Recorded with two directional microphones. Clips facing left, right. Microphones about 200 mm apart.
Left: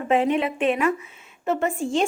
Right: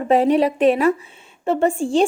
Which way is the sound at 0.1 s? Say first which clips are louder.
Right 5 dB; 35° right (ahead or behind).